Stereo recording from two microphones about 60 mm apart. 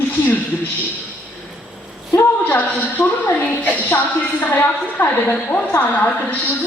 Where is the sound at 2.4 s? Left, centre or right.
Left.